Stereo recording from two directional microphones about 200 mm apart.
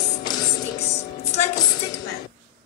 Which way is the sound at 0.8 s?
35° left (ahead or behind).